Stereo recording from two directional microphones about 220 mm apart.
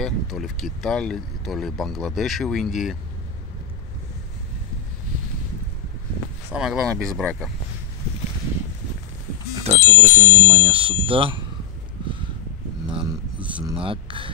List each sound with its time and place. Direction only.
0.0 s speech: centre (ahead or behind)
6.5 s speech: centre (ahead or behind)
9.6 s speech: 30° right (ahead or behind)
13.4 s speech: 5° right (ahead or behind)
13.7 s speech: 25° right (ahead or behind)